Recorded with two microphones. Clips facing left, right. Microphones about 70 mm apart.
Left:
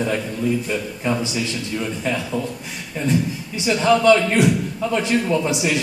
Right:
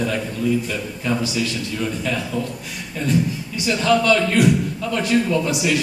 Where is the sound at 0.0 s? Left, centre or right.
Left.